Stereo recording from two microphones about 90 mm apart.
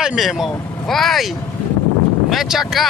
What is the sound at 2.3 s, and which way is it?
Speech, 5° right (ahead or behind).